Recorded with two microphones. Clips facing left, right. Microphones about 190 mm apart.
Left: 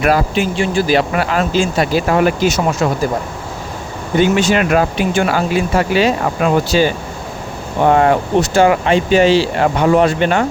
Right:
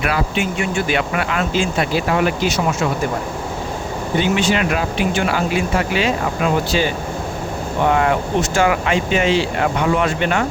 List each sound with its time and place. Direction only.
0.0 s speech: 40° left (ahead or behind)
4.2 s speech: 45° left (ahead or behind)